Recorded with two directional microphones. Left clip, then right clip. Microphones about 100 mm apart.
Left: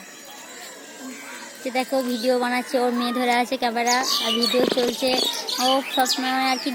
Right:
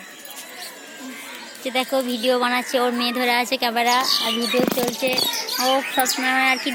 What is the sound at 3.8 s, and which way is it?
Speech, 5° left (ahead or behind).